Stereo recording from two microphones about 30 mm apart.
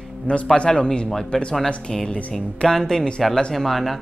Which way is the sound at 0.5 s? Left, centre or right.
Left.